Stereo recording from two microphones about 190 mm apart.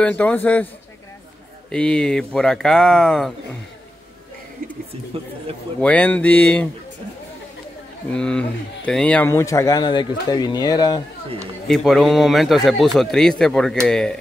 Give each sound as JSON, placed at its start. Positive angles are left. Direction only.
{"t": 0.0, "sound": "speech", "side_deg": 10}
{"t": 1.7, "sound": "a man's voice", "side_deg": 5}
{"t": 5.8, "sound": "speech", "side_deg": 5}
{"t": 8.1, "sound": "speech", "side_deg": 5}
{"t": 11.6, "sound": "a man's voice", "side_deg": 0}